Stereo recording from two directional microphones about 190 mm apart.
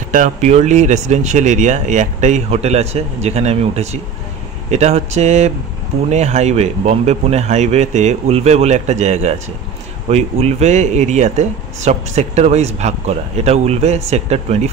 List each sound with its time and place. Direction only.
0.1 s speech: 40° right (ahead or behind)